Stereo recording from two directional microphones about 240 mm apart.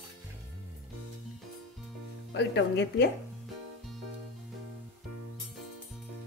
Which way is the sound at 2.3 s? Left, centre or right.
Left.